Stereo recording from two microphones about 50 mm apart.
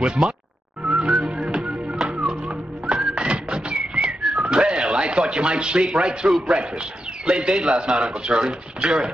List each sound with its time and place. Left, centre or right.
0.0 s a man's voice: centre
0.8 s music: centre
2.0 s music: centre
2.2 s a sound: centre
3.2 s music: right
3.7 s whistling: centre
5.9 s a man's voice: centre